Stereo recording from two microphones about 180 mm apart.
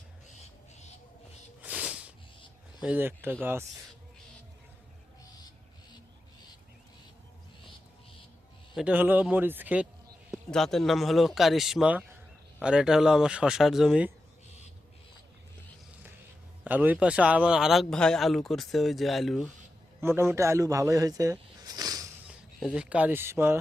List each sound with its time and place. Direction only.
1.6 s a sound: 5° right (ahead or behind)
2.8 s a man's voice: 10° right (ahead or behind)
8.7 s a man's voice: 5° right (ahead or behind)
10.3 s speech: centre (ahead or behind)
16.6 s speech: 10° right (ahead or behind)
20.0 s speech: 15° right (ahead or behind)
22.3 s speech: 5° right (ahead or behind)